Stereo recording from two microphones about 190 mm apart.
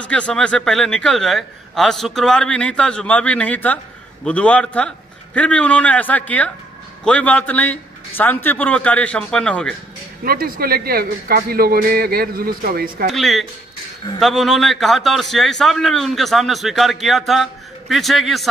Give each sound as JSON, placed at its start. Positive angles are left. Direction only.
{"t": 0.0, "sound": "a man's voice", "side_deg": 5}
{"t": 10.2, "sound": "speech", "side_deg": -50}
{"t": 13.1, "sound": "a man's voice", "side_deg": 0}